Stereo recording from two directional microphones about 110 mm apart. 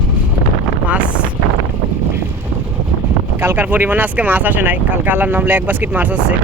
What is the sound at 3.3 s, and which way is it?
Speech, 15° right (ahead or behind).